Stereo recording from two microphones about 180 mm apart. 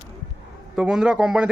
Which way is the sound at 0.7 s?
5° right (ahead or behind).